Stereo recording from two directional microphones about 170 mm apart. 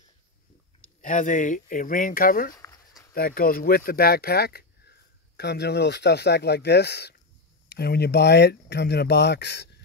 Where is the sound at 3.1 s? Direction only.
60° left (ahead or behind).